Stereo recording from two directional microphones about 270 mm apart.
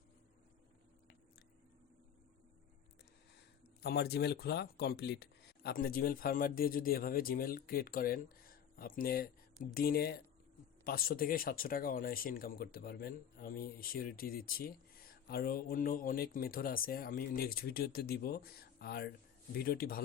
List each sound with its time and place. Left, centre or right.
3.8 s speech: left